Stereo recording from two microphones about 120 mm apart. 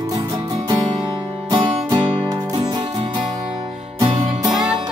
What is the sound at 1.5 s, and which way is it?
Music, 40° right (ahead or behind).